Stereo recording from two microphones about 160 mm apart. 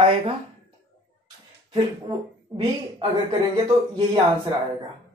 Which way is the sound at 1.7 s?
30° right (ahead or behind).